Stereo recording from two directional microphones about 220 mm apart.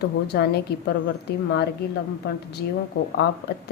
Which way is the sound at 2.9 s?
50° left (ahead or behind).